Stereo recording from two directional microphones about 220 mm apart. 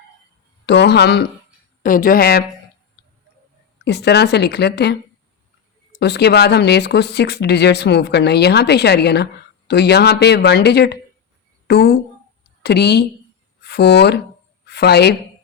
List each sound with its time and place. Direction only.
0.6 s speech: 50° left (ahead or behind)
1.8 s a woman's voice: 40° left (ahead or behind)
3.8 s a woman's voice: 50° left (ahead or behind)